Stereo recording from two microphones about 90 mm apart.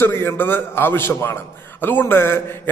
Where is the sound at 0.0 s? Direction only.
25° left (ahead or behind).